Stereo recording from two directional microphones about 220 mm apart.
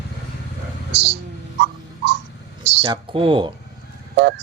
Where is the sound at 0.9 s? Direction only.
50° right (ahead or behind).